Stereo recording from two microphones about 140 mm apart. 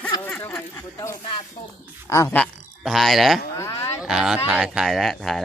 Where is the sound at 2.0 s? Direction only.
20° left (ahead or behind).